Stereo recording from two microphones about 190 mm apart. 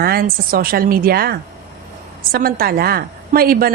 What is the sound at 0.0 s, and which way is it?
Speech, 50° right (ahead or behind).